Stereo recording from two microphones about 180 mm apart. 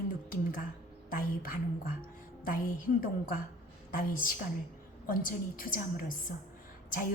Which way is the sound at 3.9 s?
50° left (ahead or behind).